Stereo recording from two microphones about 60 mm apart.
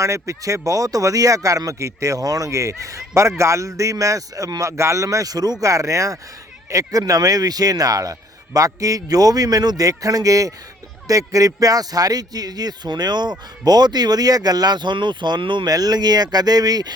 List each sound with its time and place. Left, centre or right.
0.0 s speech: right
4.8 s speech: right
6.7 s speech: right
8.5 s a man's voice: right